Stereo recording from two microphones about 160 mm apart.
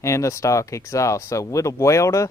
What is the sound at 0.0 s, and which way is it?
Speech, 20° left (ahead or behind).